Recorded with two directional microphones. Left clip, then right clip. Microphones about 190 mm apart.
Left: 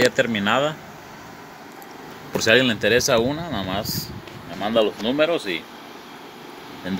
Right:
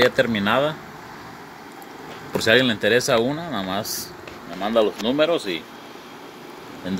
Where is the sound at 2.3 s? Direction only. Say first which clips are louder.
Even; centre (ahead or behind).